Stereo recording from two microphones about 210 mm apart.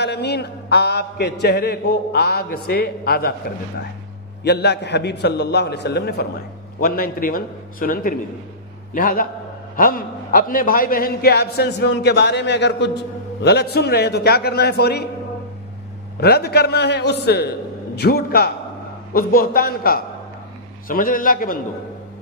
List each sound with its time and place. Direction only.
0.0 s a man's voice: 50° left (ahead or behind)
16.2 s a man's voice: 50° left (ahead or behind)